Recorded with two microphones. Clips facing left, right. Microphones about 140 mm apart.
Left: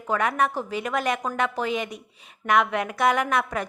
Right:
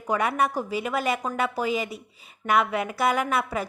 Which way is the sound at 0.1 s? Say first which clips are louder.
Even; 10° right (ahead or behind).